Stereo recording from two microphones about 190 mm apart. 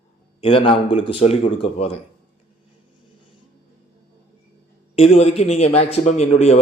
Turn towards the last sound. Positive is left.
turn(degrees=35)  # may be behind; listen again after turning